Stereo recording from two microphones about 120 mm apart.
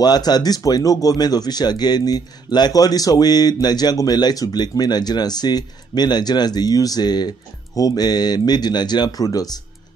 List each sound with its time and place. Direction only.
0.0 s speech: 35° left (ahead or behind)